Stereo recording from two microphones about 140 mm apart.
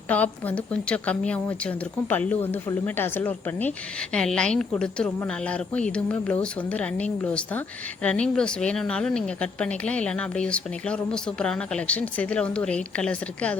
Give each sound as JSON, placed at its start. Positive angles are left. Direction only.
{"t": 0.1, "sound": "a woman's voice", "side_deg": 10}